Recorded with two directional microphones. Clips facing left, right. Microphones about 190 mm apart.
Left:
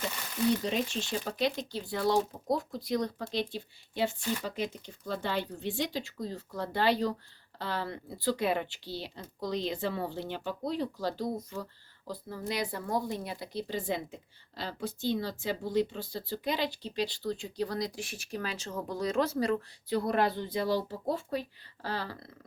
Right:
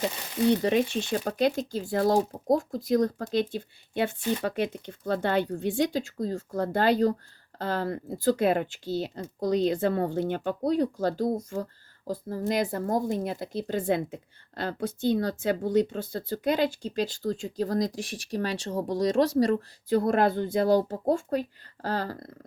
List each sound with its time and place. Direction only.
0.6 s speech: 60° right (ahead or behind); by 22.3 s 45° right (ahead or behind)